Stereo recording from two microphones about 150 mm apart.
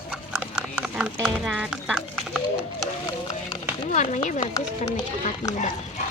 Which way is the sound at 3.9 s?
50° left (ahead or behind).